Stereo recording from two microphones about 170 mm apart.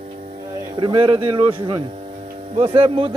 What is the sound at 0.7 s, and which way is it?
Speech, 30° right (ahead or behind).